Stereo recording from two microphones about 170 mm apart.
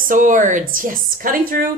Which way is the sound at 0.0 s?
50° right (ahead or behind).